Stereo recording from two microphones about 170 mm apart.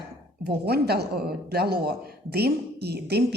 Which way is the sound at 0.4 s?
70° right (ahead or behind).